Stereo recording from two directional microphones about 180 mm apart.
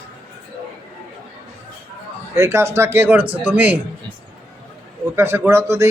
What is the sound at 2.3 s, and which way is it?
A man's voice, 15° right (ahead or behind).